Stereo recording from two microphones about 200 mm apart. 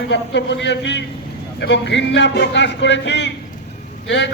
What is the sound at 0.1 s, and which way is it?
A man's voice, 60° left (ahead or behind).